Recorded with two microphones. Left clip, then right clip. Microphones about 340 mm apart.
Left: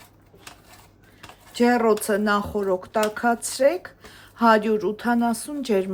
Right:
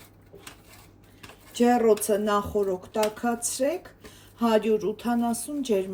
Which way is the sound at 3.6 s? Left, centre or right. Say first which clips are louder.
Left 7 dB; centre.